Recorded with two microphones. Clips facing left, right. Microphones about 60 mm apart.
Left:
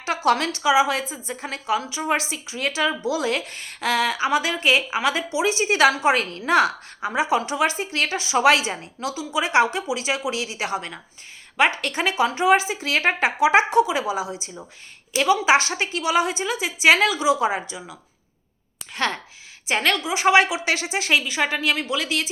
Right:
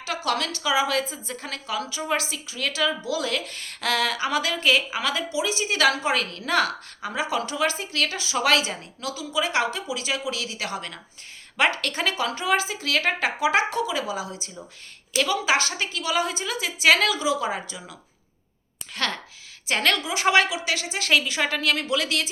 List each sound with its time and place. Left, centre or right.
0.0 s speech: left
18.9 s speech: centre
20.4 s speech: left
21.1 s a woman's voice: centre